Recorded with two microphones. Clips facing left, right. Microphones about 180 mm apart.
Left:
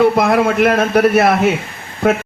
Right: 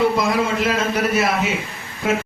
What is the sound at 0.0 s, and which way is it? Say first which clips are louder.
A man's voice: left 6 dB; 60° left (ahead or behind).